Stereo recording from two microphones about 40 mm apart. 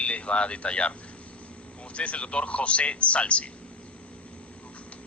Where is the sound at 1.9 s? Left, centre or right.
Left.